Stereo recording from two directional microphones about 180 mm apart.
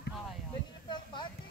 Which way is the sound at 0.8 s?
25° left (ahead or behind).